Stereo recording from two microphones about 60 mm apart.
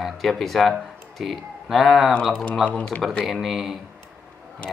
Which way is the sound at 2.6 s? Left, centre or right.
Left.